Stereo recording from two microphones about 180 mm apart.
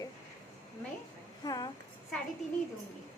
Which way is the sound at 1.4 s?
20° left (ahead or behind).